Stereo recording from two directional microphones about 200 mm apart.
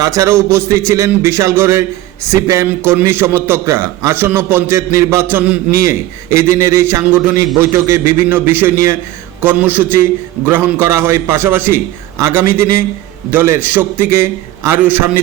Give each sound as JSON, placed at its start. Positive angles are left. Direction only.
{"t": 0.0, "sound": "a man's voice", "side_deg": -15}